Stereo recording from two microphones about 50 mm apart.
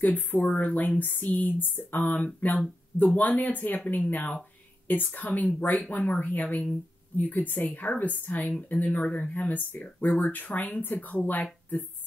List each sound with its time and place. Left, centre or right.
0.0 s speech: left